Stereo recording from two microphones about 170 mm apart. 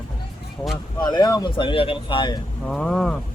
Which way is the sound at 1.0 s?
25° left (ahead or behind).